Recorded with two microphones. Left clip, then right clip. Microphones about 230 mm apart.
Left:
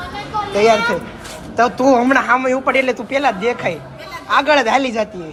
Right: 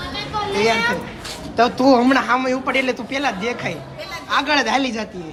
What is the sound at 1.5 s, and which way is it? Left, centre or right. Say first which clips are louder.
Speech: left 2 dB; centre.